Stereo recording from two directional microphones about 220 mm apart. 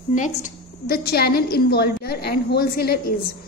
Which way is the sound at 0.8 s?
45° left (ahead or behind).